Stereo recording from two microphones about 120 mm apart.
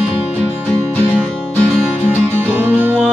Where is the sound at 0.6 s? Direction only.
15° left (ahead or behind).